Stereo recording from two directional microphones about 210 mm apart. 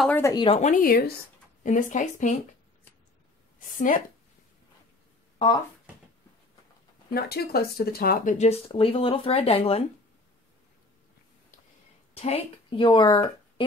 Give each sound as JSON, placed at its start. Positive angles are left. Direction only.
{"t": 0.0, "sound": "speech", "side_deg": 10}
{"t": 0.3, "sound": "speech", "side_deg": 20}
{"t": 0.6, "sound": "speech", "side_deg": 40}
{"t": 3.5, "sound": "a woman's voice", "side_deg": 40}
{"t": 7.2, "sound": "speech", "side_deg": 50}
{"t": 12.2, "sound": "speech", "side_deg": 25}